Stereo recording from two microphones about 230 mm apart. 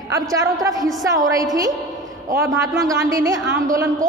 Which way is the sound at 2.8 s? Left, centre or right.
Centre.